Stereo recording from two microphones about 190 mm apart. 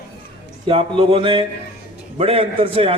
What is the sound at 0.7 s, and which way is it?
A man's voice, 30° right (ahead or behind).